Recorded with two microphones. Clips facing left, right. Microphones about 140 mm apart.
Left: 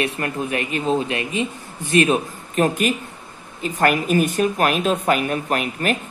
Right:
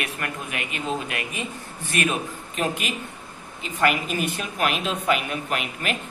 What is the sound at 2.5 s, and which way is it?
A man's voice, 45° left (ahead or behind).